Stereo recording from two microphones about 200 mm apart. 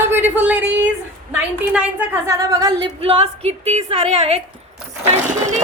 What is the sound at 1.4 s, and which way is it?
A woman's voice, 5° right (ahead or behind).